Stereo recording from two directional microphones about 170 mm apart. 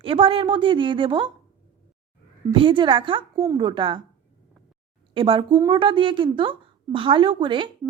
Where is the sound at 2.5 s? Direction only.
30° right (ahead or behind).